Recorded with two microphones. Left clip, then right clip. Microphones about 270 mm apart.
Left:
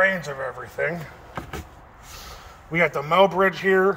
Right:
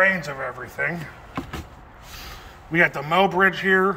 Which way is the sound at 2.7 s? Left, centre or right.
Left.